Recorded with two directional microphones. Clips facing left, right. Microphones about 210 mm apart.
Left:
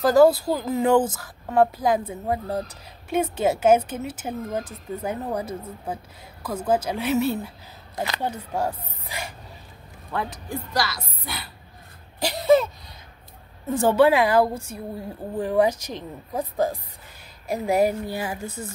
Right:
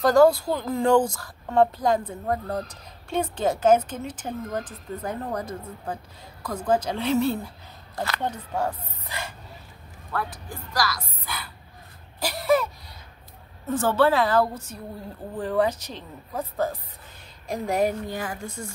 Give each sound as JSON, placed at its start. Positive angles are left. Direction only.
{"t": 0.0, "sound": "a woman's voice", "side_deg": 5}
{"t": 10.1, "sound": "speech", "side_deg": 25}
{"t": 12.2, "sound": "a sound", "side_deg": 20}
{"t": 13.7, "sound": "a woman's voice", "side_deg": 15}